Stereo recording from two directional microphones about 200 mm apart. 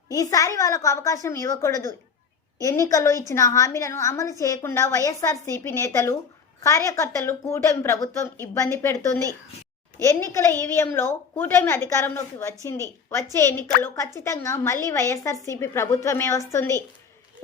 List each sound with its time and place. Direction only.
0.1 s a woman's voice: 15° left (ahead or behind)
10.0 s a woman's voice: 15° left (ahead or behind)